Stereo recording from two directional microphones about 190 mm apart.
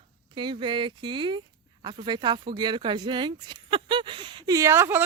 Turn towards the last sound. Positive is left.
turn(degrees=-10)  # may be behind; listen again after turning